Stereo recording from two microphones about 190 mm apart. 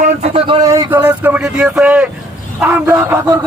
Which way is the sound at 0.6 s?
15° right (ahead or behind).